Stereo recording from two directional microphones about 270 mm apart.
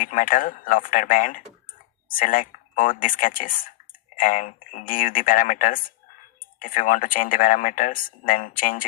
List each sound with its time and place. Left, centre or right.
0.0 s speech: left